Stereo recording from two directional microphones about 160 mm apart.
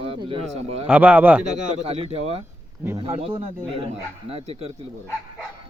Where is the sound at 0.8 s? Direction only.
10° right (ahead or behind).